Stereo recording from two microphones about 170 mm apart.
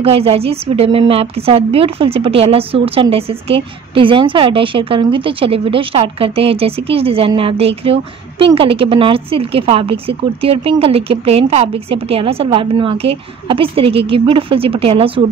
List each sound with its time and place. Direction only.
0.0 s a woman's voice: 35° right (ahead or behind)